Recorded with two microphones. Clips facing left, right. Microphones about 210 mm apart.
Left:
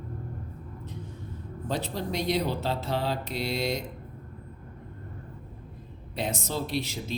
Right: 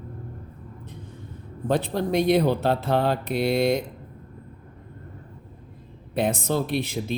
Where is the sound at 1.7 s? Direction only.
55° right (ahead or behind).